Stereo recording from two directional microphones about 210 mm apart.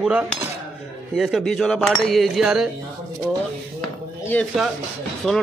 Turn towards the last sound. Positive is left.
turn(degrees=0)  # may be behind; listen again after turning